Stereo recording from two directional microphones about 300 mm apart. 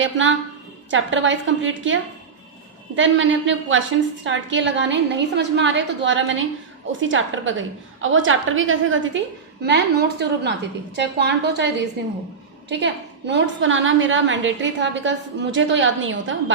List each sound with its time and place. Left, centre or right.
0.0 s a woman's voice: right